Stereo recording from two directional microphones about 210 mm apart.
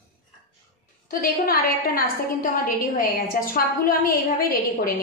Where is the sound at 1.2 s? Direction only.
45° left (ahead or behind).